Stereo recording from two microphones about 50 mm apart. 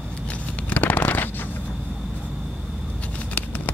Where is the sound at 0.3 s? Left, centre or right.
Left.